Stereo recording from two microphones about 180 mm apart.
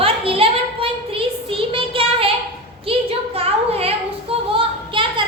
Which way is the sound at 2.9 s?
30° right (ahead or behind).